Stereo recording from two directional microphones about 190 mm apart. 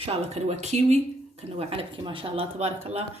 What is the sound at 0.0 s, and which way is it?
A woman's voice, 35° right (ahead or behind).